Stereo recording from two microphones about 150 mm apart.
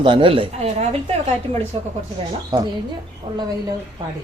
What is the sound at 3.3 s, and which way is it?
Speech, 35° right (ahead or behind).